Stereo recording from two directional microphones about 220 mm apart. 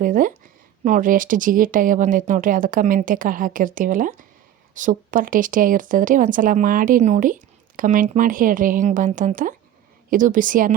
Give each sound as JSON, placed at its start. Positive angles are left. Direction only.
{"t": 0.0, "sound": "speech", "side_deg": -40}